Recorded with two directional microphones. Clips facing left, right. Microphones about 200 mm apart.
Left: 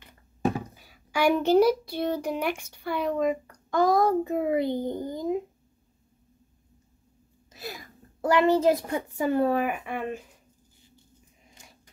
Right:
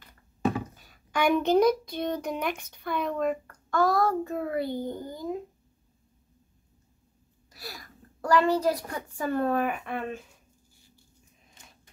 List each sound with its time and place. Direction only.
0.6 s a child's voice: 10° left (ahead or behind)
7.5 s a child's voice: 20° left (ahead or behind)